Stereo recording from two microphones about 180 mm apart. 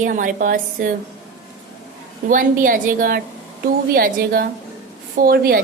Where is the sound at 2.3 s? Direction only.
50° right (ahead or behind).